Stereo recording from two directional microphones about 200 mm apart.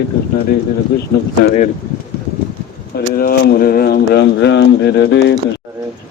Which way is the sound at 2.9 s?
50° left (ahead or behind).